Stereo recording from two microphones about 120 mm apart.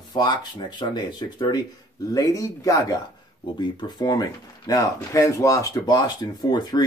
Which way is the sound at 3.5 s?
40° left (ahead or behind).